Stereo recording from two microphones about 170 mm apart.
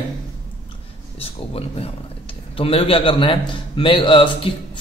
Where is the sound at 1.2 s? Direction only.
35° left (ahead or behind).